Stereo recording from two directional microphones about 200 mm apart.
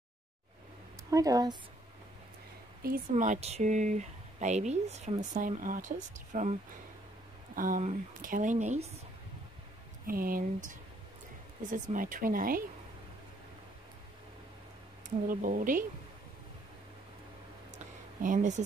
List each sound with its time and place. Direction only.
1.1 s speech: 20° right (ahead or behind)
2.8 s speech: 45° right (ahead or behind)
3.2 s speech: 35° right (ahead or behind)
7.5 s speech: 45° right (ahead or behind)
10.0 s speech: 45° right (ahead or behind)
15.0 s speech: 40° right (ahead or behind)
18.2 s speech: 40° right (ahead or behind)